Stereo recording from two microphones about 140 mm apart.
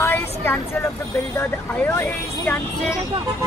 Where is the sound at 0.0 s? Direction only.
15° left (ahead or behind).